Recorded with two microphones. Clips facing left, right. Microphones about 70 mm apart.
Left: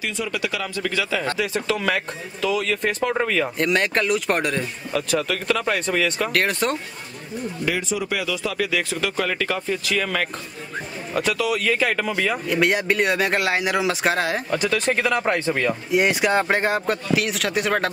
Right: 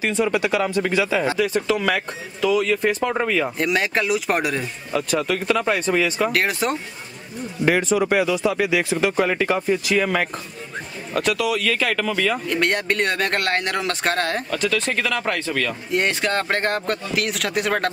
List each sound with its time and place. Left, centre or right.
0.0 s speech: right
1.3 s speech: centre
7.6 s speech: right
8.3 s speech: right
11.1 s speech: centre
11.6 s speech: centre
14.5 s speech: centre
15.9 s speech: centre